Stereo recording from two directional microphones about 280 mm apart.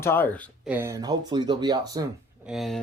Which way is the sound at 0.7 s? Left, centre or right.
Centre.